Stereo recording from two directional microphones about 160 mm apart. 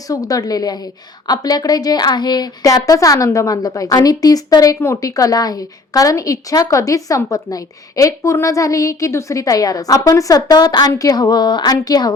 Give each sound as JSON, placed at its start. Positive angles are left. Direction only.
{"t": 0.1, "sound": "a woman's voice", "side_deg": 20}